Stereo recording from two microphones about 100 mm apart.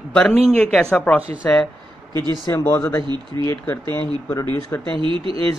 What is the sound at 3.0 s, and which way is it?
Speech, 50° right (ahead or behind).